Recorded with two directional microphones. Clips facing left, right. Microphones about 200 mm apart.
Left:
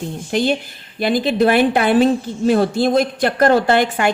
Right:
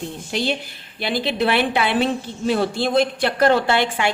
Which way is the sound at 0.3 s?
50° left (ahead or behind).